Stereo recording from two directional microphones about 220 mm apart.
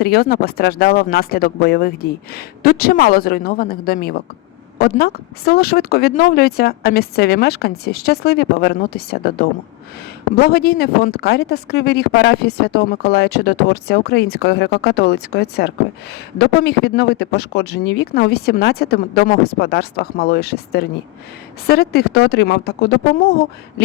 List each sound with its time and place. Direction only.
0.0 s speech: 45° left (ahead or behind)